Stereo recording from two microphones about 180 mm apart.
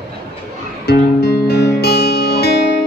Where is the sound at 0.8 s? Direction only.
60° left (ahead or behind).